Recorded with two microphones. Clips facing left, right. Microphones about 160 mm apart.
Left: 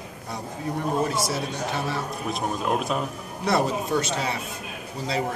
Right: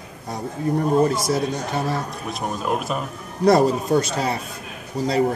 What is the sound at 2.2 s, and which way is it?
Speech, centre (ahead or behind).